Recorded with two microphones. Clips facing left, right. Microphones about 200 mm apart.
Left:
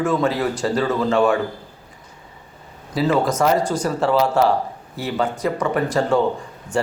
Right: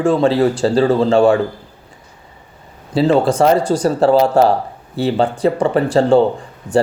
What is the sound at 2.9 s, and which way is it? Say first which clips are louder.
Speech: right 6 dB; 30° right (ahead or behind).